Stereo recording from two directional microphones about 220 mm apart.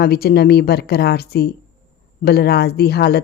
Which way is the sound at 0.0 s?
45° left (ahead or behind).